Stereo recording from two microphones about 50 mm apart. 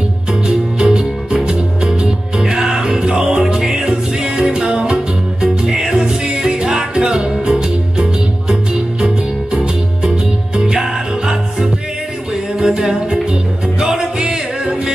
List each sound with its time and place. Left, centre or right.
0.3 s music: centre
10.0 s music: centre